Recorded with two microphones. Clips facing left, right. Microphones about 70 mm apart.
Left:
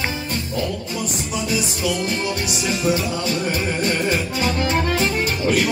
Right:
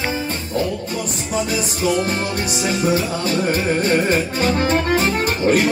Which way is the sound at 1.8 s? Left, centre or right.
Right.